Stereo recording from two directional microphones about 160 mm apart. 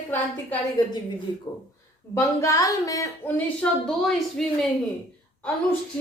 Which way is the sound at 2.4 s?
20° left (ahead or behind).